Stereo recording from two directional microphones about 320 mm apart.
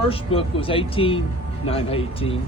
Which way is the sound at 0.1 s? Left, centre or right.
Centre.